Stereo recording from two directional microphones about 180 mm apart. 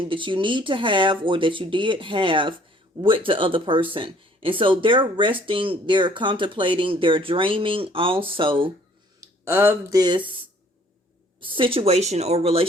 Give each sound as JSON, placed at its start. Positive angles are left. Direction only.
{"t": 0.0, "sound": "speech", "side_deg": -30}
{"t": 9.2, "sound": "speech", "side_deg": -15}
{"t": 11.3, "sound": "a woman's voice", "side_deg": -30}